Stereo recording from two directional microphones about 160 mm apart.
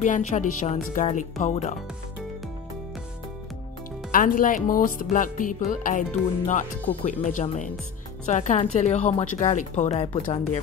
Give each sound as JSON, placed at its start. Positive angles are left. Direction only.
{"t": 0.0, "sound": "speech", "side_deg": 50}
{"t": 4.1, "sound": "speech", "side_deg": 60}